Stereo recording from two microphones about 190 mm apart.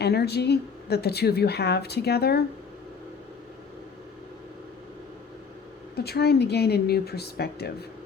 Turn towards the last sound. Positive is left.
turn(degrees=55)  # may be behind; listen again after turning